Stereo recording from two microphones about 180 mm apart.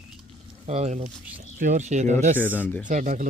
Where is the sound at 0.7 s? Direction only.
40° right (ahead or behind).